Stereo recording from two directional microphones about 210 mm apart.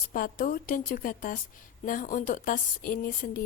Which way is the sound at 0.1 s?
40° left (ahead or behind).